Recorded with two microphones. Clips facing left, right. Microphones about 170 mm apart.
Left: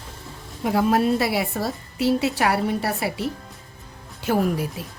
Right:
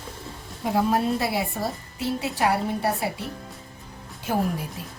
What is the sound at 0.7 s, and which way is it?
A woman's voice, 90° left.